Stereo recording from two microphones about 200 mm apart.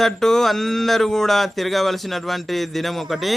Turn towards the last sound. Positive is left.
turn(degrees=0)  # may be behind; listen again after turning